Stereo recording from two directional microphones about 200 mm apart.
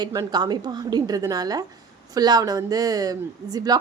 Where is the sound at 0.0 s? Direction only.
20° right (ahead or behind).